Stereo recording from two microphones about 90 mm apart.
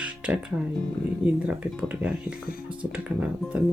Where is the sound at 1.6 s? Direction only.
15° right (ahead or behind).